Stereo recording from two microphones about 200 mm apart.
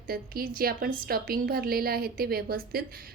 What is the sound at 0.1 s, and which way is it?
A woman's voice, 45° right (ahead or behind).